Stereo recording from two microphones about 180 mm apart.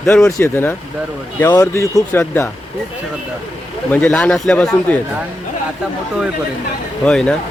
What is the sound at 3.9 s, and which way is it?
Speech, 10° left (ahead or behind).